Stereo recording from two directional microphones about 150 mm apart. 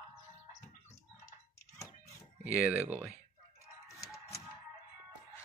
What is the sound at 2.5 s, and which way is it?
Speech, 10° right (ahead or behind).